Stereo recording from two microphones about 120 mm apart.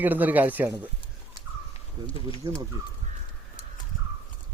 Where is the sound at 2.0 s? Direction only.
10° left (ahead or behind).